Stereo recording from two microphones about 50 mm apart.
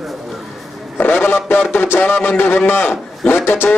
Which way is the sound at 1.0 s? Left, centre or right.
Left.